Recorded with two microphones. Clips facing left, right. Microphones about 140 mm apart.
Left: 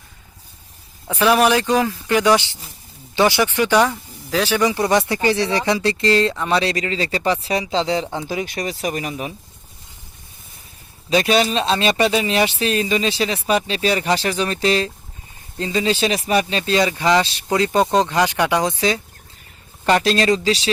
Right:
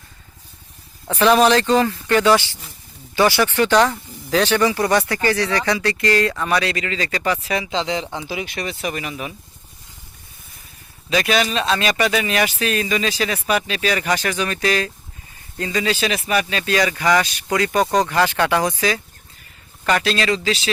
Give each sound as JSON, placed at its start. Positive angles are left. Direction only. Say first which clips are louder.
{"t": 1.0, "sound": "speech", "louder": "right 1 dB", "side_deg": 10}
{"t": 4.7, "sound": "speech", "louder": "left 1 dB", "side_deg": 20}
{"t": 6.6, "sound": "speech", "louder": "left 2 dB", "side_deg": 35}
{"t": 11.1, "sound": "speech", "louder": "left 2 dB", "side_deg": 30}